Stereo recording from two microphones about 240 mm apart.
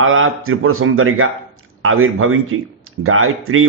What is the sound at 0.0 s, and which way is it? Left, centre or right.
Speech, right.